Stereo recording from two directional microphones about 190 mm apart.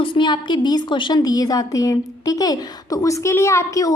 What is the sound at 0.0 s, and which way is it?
A woman's voice, 25° left (ahead or behind).